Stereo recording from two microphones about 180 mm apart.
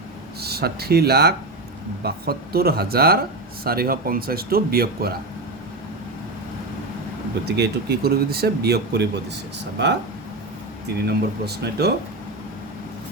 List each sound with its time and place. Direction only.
0.4 s speech: 60° right (ahead or behind)
7.4 s speech: 65° right (ahead or behind)
11.0 s speech: 65° right (ahead or behind)